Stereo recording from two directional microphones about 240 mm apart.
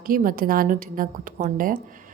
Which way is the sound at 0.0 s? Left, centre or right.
Right.